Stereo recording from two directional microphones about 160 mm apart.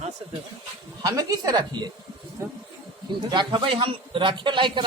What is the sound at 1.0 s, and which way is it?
Speech, 20° right (ahead or behind).